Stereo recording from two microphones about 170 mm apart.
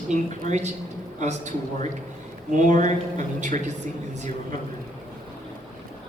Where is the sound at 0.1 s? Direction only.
45° right (ahead or behind).